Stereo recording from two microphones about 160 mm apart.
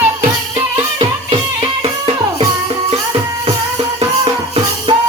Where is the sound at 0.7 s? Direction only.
30° right (ahead or behind).